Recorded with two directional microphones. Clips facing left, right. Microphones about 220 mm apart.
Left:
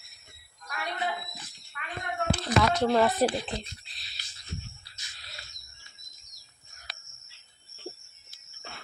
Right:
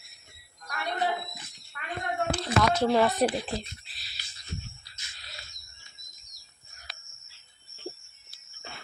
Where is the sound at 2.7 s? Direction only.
5° right (ahead or behind).